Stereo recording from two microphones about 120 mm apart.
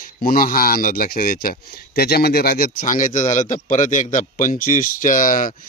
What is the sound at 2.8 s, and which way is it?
A man's voice, 90° left.